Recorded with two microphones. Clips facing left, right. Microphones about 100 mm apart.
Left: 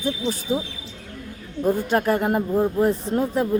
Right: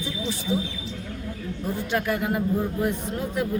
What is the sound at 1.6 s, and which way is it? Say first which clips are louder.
Speech: left 7 dB; 50° left (ahead or behind).